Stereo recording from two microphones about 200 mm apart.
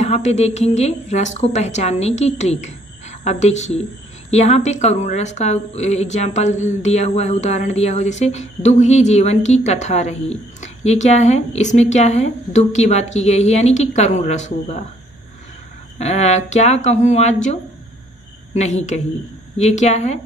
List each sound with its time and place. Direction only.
0.0 s a woman's voice: 35° left (ahead or behind)
16.0 s a woman's voice: 35° left (ahead or behind)